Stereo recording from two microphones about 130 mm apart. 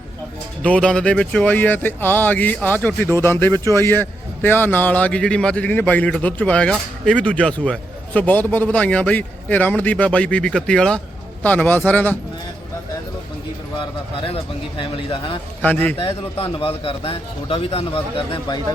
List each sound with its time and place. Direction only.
0.6 s a man's voice: 10° left (ahead or behind)
13.7 s speech: 45° left (ahead or behind)
15.6 s a man's voice: 15° left (ahead or behind)
16.0 s a man's voice: 40° left (ahead or behind)